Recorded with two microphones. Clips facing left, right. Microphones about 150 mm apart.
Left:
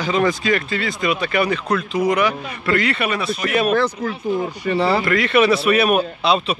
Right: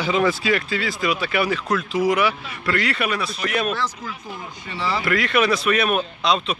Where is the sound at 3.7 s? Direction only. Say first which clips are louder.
Left 8 dB; 50° left (ahead or behind).